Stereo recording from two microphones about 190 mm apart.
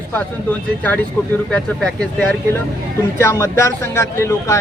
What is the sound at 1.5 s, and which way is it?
Speech, 5° left (ahead or behind).